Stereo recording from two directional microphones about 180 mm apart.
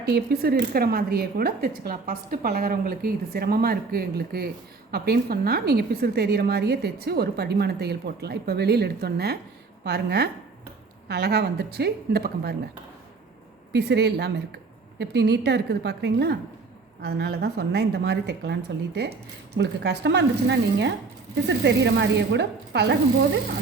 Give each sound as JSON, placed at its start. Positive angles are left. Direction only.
{"t": 0.0, "sound": "a woman's voice", "side_deg": -60}
{"t": 13.7, "sound": "a woman's voice", "side_deg": -65}